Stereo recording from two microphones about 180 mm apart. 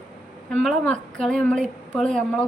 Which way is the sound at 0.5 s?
5° left (ahead or behind).